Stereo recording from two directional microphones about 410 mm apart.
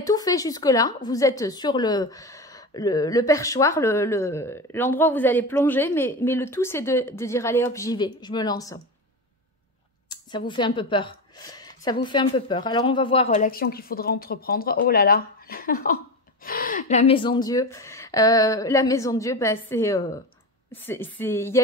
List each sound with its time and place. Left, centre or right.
0.0 s a woman's voice: centre
10.0 s a woman's voice: centre